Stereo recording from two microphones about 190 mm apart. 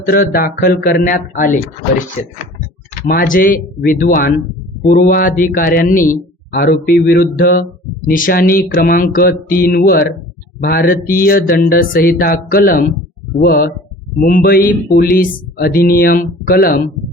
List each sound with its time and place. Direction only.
0.0 s speech: 50° left (ahead or behind)
3.1 s speech: 50° left (ahead or behind)